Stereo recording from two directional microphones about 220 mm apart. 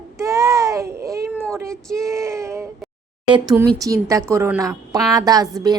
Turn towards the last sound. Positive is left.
turn(degrees=-15)  # may be behind; listen again after turning